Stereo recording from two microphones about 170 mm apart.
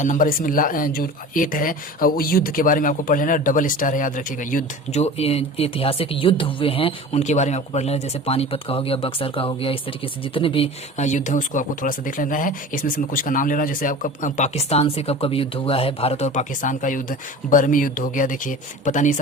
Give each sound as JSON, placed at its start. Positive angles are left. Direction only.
{"t": 0.0, "sound": "speech", "side_deg": 50}
{"t": 4.5, "sound": "speech", "side_deg": 40}